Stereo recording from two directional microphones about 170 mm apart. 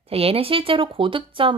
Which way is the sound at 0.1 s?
35° right (ahead or behind).